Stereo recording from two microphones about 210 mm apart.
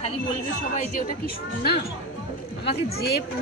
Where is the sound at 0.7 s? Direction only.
40° left (ahead or behind).